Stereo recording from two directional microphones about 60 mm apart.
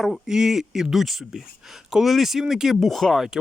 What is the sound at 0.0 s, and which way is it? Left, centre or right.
Speech, centre.